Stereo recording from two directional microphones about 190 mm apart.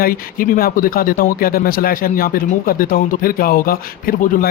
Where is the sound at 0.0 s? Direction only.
50° left (ahead or behind).